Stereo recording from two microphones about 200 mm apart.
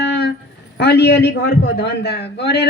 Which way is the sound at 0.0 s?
55° left (ahead or behind).